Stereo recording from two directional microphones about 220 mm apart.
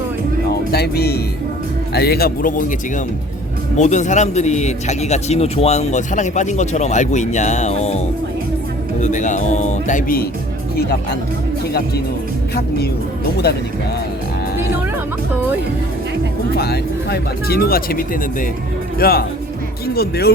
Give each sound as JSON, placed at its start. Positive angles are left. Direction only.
{"t": 0.5, "sound": "speech", "side_deg": 45}
{"t": 3.8, "sound": "a man's voice", "side_deg": 35}
{"t": 9.0, "sound": "a man's voice", "side_deg": 35}
{"t": 13.3, "sound": "speech", "side_deg": 50}
{"t": 16.6, "sound": "speech", "side_deg": 45}